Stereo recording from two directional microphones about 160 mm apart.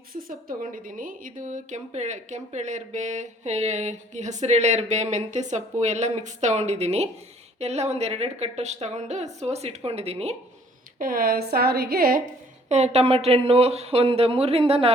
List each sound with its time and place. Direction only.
0.1 s a woman's voice: 65° right (ahead or behind); by 10.3 s 40° right (ahead or behind)
11.0 s a woman's voice: 65° right (ahead or behind)
12.6 s a woman's voice: 45° right (ahead or behind)